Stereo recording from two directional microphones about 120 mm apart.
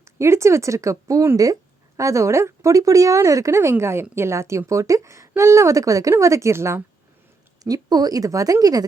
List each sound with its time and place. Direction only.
0.0 s speech: 25° right (ahead or behind)
7.6 s a woman's voice: 35° right (ahead or behind)